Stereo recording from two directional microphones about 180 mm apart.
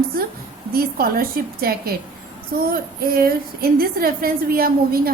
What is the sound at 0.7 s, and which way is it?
A woman's voice, 55° right (ahead or behind).